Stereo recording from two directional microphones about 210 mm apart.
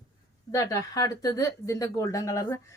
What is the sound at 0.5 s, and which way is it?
Speech, 15° left (ahead or behind).